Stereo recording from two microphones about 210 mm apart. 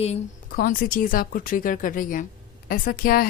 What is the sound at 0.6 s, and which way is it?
Speech, 40° left (ahead or behind).